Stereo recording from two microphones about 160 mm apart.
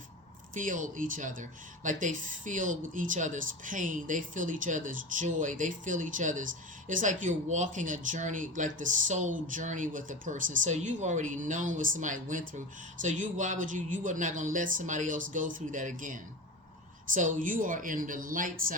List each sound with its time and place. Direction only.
0.5 s speech: 55° right (ahead or behind)